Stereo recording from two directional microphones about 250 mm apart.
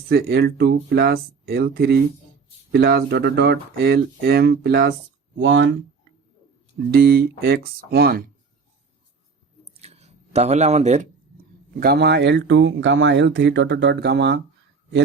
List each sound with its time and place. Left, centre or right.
0.1 s speech: right
5.4 s speech: right
6.9 s speech: right
9.7 s a sound: right
11.8 s speech: right